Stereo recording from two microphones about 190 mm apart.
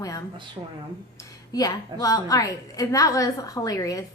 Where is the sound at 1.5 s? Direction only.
20° left (ahead or behind).